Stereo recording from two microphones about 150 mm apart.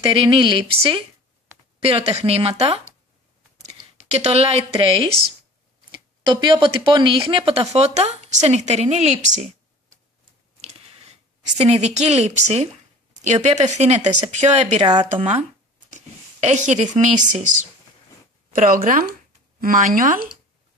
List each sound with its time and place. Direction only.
0.1 s speech: 35° right (ahead or behind)
4.1 s speech: 45° right (ahead or behind)
10.6 s a sound: 45° right (ahead or behind)
11.5 s speech: 45° right (ahead or behind)
14.8 s speech: 30° right (ahead or behind)
15.9 s speech: 50° right (ahead or behind)
18.5 s speech: 65° right (ahead or behind)